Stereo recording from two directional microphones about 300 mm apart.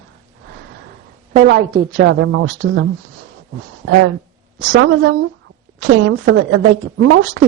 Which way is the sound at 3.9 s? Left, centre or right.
Right.